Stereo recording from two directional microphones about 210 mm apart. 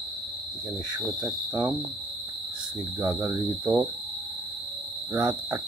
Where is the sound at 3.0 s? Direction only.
15° right (ahead or behind).